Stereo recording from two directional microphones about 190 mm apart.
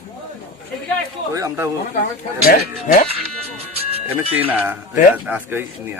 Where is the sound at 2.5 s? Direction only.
45° left (ahead or behind).